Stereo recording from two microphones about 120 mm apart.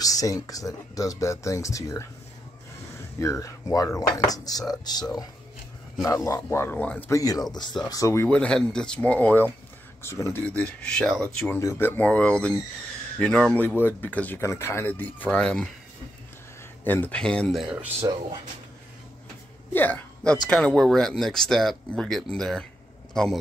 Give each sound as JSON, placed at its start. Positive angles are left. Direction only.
{"t": 0.0, "sound": "speech", "side_deg": 30}
{"t": 3.2, "sound": "speech", "side_deg": 25}
{"t": 6.0, "sound": "speech", "side_deg": 25}
{"t": 7.1, "sound": "speech", "side_deg": 30}
{"t": 8.3, "sound": "speech", "side_deg": 10}
{"t": 10.4, "sound": "speech", "side_deg": 10}
{"t": 11.5, "sound": "speech", "side_deg": 20}
{"t": 16.8, "sound": "speech", "side_deg": 15}
{"t": 18.0, "sound": "speech", "side_deg": -35}
{"t": 19.7, "sound": "a man's voice", "side_deg": 15}